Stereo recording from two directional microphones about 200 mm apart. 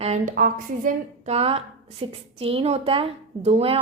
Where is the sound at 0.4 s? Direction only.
40° right (ahead or behind).